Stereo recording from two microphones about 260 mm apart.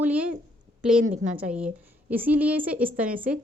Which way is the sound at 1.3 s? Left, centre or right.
Centre.